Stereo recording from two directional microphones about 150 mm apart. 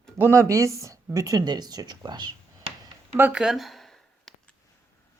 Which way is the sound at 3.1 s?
10° right (ahead or behind).